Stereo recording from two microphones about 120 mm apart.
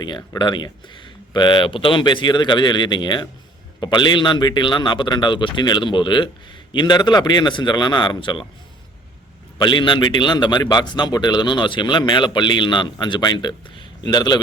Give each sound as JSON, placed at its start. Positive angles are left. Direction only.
{"t": 0.3, "sound": "a man's voice", "side_deg": 40}
{"t": 9.6, "sound": "a man's voice", "side_deg": 40}